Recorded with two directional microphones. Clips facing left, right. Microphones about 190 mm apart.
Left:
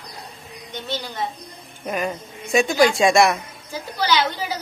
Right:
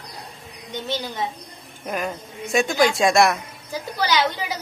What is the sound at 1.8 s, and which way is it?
A man's voice, centre (ahead or behind).